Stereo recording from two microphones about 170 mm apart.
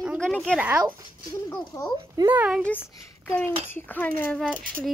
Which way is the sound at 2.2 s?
10° right (ahead or behind).